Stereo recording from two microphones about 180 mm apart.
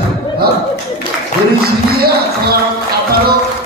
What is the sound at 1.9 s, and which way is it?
Speech, 60° right (ahead or behind).